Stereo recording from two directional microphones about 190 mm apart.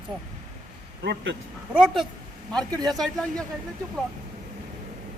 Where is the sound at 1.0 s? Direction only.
70° right (ahead or behind).